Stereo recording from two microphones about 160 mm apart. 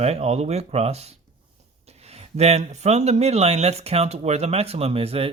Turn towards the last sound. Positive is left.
turn(degrees=-40)  # may be behind; listen again after turning